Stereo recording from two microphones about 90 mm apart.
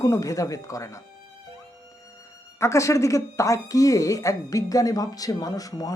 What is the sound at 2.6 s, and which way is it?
Speech, 35° left (ahead or behind).